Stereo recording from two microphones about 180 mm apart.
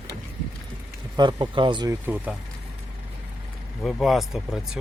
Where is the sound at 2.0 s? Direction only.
10° right (ahead or behind).